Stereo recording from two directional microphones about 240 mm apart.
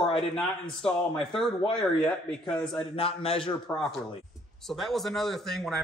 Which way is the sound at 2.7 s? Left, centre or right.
Left.